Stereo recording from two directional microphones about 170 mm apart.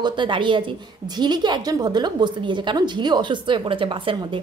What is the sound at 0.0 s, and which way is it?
A woman's voice, 30° right (ahead or behind).